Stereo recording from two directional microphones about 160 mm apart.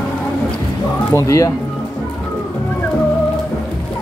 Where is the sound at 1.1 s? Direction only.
20° left (ahead or behind).